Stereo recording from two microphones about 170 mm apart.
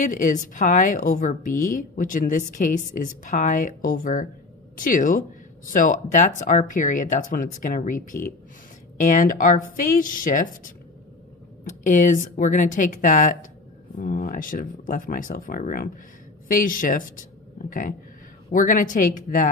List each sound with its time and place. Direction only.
0.0 s a woman's voice: 50° left (ahead or behind)